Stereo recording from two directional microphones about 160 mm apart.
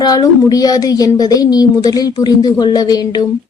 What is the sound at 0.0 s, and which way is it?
Speech, 25° left (ahead or behind).